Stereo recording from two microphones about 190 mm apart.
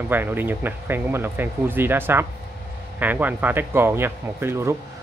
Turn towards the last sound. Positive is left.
turn(degrees=-15)  # may be behind; listen again after turning